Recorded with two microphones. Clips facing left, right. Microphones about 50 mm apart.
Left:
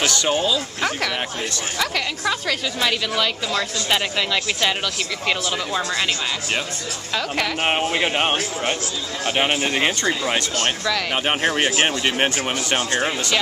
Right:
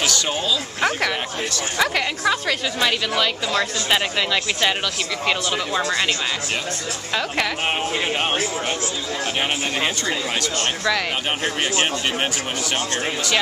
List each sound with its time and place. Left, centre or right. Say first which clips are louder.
0.3 s a woman's voice: left 3 dB; centre
0.7 s speech: right 2 dB; centre
2.2 s a woman's voice: right 2 dB; centre
7.6 s speech: left 2 dB; centre
9.4 s speech: left 4 dB; centre
11.2 s speech: left 3 dB; centre